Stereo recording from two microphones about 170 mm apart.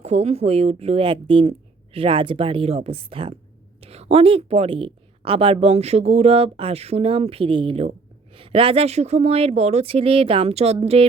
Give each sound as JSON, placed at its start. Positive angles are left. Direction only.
{"t": 0.0, "sound": "a woman's voice", "side_deg": -40}